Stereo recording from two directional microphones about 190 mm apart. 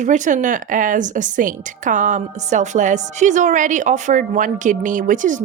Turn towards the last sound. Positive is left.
turn(degrees=-40)  # may be behind; listen again after turning